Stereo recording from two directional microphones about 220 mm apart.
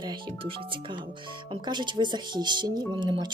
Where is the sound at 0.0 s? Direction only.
20° right (ahead or behind).